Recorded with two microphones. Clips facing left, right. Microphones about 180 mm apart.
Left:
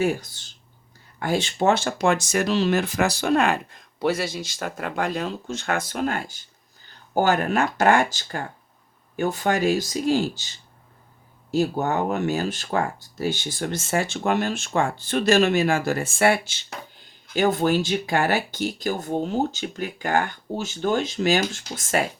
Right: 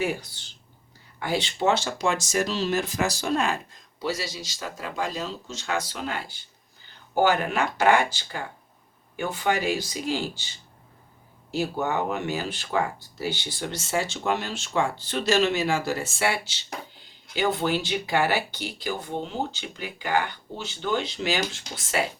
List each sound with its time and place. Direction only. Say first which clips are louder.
0.0 s speech: left 5 dB; 45° left (ahead or behind)
11.5 s speech: left 4 dB; 45° left (ahead or behind)